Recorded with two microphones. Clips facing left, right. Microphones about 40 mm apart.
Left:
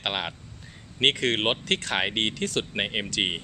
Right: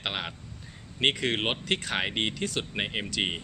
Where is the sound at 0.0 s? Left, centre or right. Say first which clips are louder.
Left 3 dB; centre.